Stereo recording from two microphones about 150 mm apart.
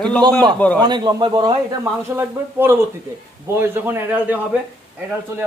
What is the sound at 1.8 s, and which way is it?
A man's voice, 15° right (ahead or behind).